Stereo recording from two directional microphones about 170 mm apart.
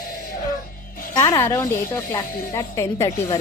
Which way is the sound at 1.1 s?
20° left (ahead or behind).